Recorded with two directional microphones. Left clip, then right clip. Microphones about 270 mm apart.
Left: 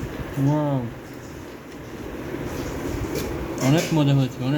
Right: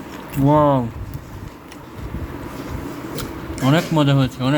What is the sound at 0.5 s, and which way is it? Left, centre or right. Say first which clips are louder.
Speech: right 12 dB; right.